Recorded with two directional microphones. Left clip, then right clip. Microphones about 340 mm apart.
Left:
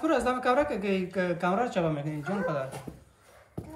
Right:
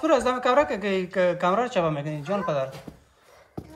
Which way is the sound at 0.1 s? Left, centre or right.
Right.